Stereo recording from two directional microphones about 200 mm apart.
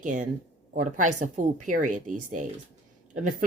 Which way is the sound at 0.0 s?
40° right (ahead or behind).